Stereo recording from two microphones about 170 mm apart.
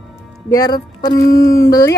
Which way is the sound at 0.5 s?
20° left (ahead or behind).